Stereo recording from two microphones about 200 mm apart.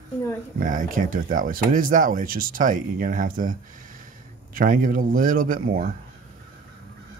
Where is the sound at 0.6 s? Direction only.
40° right (ahead or behind).